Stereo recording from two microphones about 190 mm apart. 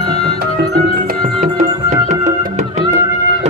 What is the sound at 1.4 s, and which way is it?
Music, 40° right (ahead or behind).